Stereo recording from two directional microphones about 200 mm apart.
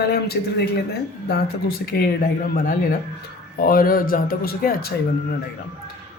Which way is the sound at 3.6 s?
45° left (ahead or behind).